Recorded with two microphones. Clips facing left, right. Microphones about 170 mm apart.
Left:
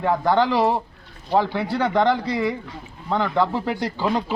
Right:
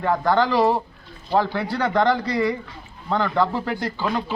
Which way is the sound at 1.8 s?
15° left (ahead or behind).